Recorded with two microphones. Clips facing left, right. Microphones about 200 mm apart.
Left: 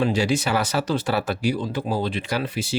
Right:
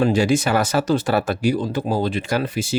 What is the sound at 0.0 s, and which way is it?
Speech, 50° right (ahead or behind).